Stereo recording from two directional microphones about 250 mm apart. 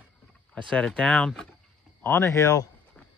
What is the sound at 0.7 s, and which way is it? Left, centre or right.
Speech, centre.